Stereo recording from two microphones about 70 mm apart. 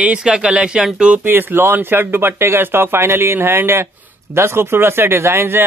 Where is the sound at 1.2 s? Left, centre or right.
Right.